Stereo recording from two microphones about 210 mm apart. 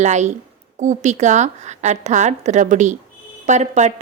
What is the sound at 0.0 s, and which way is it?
A woman's voice, 35° right (ahead or behind).